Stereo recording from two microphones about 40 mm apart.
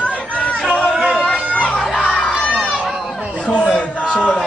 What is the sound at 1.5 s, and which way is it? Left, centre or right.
Crowd, left.